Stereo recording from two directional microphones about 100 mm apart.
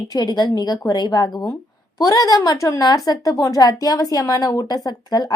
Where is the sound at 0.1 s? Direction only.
45° left (ahead or behind).